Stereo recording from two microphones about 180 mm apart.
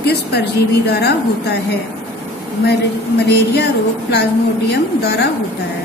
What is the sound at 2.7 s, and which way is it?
A woman's voice, 65° left (ahead or behind).